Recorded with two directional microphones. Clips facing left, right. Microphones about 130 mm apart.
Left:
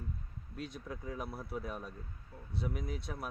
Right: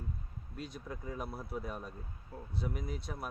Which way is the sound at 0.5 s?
Centre (ahead or behind).